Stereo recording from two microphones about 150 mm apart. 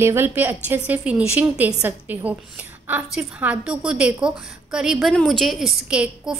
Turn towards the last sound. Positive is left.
turn(degrees=-5)  # may be behind; listen again after turning